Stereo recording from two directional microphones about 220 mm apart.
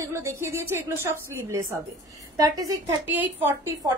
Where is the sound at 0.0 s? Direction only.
15° right (ahead or behind).